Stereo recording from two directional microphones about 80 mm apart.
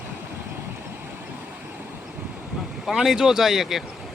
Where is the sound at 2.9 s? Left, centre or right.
Centre.